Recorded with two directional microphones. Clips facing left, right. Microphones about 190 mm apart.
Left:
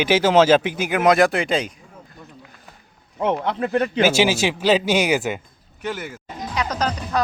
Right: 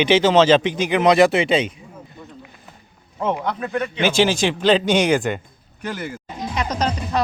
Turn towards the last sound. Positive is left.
turn(degrees=-10)  # may be behind; listen again after turning